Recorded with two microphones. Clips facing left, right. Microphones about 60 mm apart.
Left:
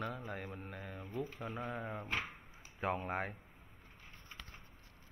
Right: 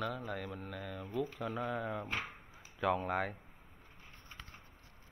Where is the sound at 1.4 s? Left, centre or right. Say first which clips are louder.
Right 4 dB; left.